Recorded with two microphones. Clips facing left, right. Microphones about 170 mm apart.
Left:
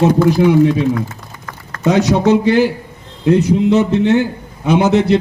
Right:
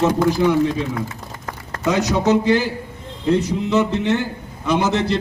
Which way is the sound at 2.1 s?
60° left (ahead or behind).